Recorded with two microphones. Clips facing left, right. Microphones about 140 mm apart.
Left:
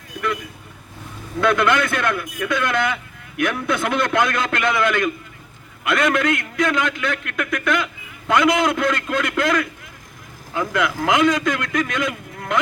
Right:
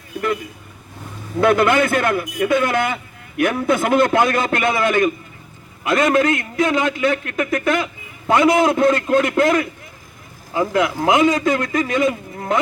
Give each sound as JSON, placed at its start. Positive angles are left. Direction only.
{"t": 1.4, "sound": "a man's voice", "side_deg": -45}
{"t": 2.0, "sound": "a man's voice", "side_deg": -30}
{"t": 2.5, "sound": "a man's voice", "side_deg": -50}
{"t": 3.4, "sound": "a man's voice", "side_deg": -35}